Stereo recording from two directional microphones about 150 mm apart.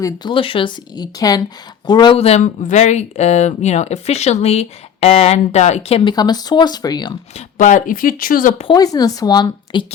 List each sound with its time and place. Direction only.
0.0 s speech: 30° left (ahead or behind)
2.1 s speech: 45° left (ahead or behind)
6.1 s speech: 25° left (ahead or behind)
7.3 s speech: 55° left (ahead or behind)
8.7 s speech: 25° left (ahead or behind)